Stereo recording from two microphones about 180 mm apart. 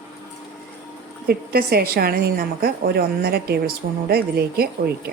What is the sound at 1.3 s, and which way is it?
A woman's voice, 55° right (ahead or behind).